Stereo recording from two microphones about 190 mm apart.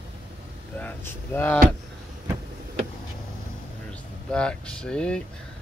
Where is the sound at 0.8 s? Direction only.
10° left (ahead or behind).